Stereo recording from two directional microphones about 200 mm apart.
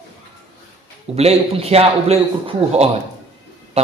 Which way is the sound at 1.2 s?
30° right (ahead or behind).